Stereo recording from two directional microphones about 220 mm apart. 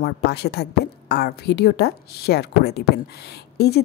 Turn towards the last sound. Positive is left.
turn(degrees=45)  # may be behind; listen again after turning